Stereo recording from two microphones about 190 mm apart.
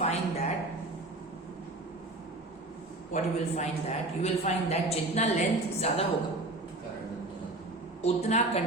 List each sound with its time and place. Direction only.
0.0 s a sound: 35° left (ahead or behind)
3.1 s a man's voice: 40° left (ahead or behind)
8.0 s a man's voice: 35° left (ahead or behind)